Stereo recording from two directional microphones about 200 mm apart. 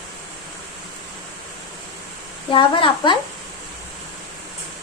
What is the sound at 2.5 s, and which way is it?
Speech, 25° left (ahead or behind).